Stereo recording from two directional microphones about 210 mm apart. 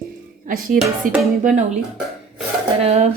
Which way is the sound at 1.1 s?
40° right (ahead or behind).